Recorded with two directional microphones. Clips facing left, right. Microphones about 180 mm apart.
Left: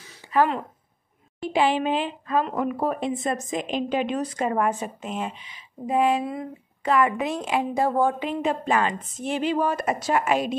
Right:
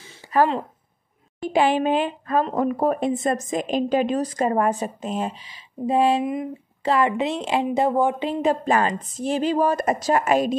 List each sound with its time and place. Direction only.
0.3 s speech: 45° right (ahead or behind)
1.5 s a woman's voice: 45° right (ahead or behind)
2.4 s a woman's voice: 40° right (ahead or behind)
6.2 s a woman's voice: 20° right (ahead or behind)
6.8 s a woman's voice: 30° right (ahead or behind)
8.3 s a woman's voice: 35° right (ahead or behind)